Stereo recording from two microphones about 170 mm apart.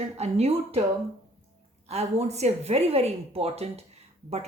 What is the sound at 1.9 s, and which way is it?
Speech, 40° right (ahead or behind).